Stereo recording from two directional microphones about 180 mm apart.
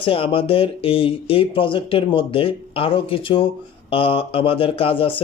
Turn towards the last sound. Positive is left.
turn(degrees=30)  # may be behind; listen again after turning